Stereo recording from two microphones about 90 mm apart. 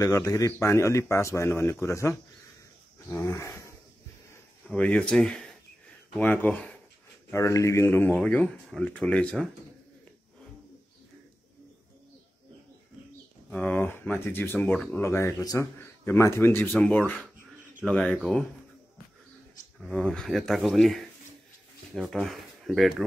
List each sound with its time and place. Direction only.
0.0 s speech: 40° left (ahead or behind)
3.1 s a sound: 30° left (ahead or behind)
4.6 s speech: 15° left (ahead or behind)
6.1 s speech: 20° left (ahead or behind)
7.2 s speech: 35° left (ahead or behind)
8.1 s speech: 15° left (ahead or behind)
13.5 s speech: 10° left (ahead or behind)
13.8 s speech: 20° left (ahead or behind); by 15.7 s 40° left (ahead or behind)
15.8 s speech: 30° left (ahead or behind); by 18.1 s 5° left (ahead or behind)
20.0 s speech: 5° left (ahead or behind)